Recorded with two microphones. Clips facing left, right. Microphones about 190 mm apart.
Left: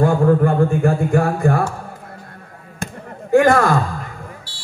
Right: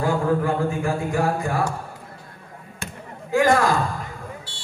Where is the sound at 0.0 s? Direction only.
55° left (ahead or behind).